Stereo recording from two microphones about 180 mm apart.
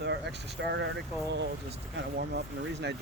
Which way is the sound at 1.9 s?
65° right (ahead or behind).